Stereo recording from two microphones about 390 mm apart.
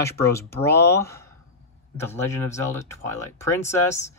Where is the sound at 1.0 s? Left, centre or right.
Centre.